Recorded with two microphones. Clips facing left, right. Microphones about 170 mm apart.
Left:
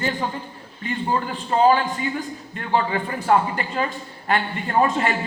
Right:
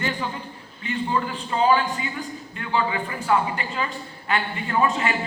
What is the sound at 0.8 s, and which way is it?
A man's voice, 40° left (ahead or behind).